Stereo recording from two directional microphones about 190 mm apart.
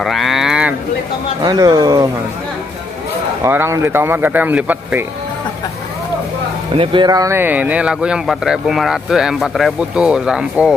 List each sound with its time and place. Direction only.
0.0 s cattle: centre (ahead or behind)
1.4 s speech: 20° right (ahead or behind)
3.4 s speech: 10° right (ahead or behind)
6.7 s speech: 25° right (ahead or behind); by 10.7 s 5° right (ahead or behind)